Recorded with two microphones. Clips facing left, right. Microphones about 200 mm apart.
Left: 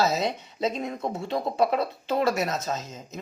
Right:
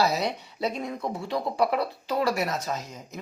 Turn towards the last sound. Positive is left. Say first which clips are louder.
# left 1 dB
turn(degrees=20)  # may be behind; listen again after turning